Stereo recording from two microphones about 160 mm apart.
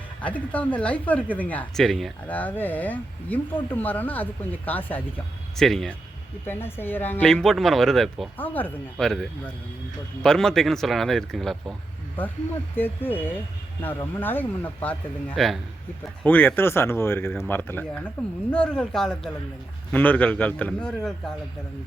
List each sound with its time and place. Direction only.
0.2 s speech: 10° left (ahead or behind)
6.4 s speech: 15° left (ahead or behind)
8.4 s speech: 10° left (ahead or behind)
12.7 s speech: 15° left (ahead or behind)
16.2 s speech: 10° left (ahead or behind)